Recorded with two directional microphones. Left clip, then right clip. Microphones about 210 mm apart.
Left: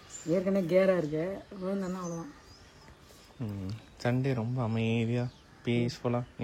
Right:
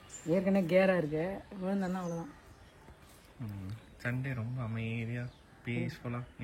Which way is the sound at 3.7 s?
15° left (ahead or behind).